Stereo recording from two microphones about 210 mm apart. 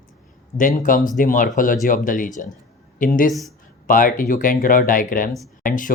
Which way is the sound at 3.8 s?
40° left (ahead or behind).